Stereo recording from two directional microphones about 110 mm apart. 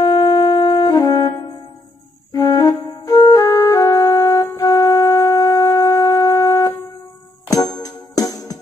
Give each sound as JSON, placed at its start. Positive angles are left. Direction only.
{"t": 0.0, "sound": "music", "side_deg": 30}
{"t": 2.3, "sound": "flute", "side_deg": 35}
{"t": 7.4, "sound": "music", "side_deg": 35}